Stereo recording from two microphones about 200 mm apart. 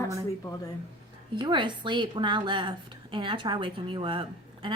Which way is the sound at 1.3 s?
25° right (ahead or behind).